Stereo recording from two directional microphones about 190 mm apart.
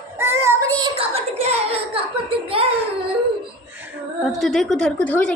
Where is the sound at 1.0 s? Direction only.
35° right (ahead or behind).